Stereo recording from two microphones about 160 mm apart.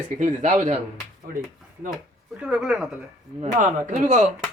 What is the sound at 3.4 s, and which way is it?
Speech, 50° right (ahead or behind).